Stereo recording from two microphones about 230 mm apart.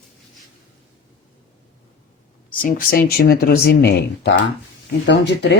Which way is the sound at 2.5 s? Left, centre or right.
Left.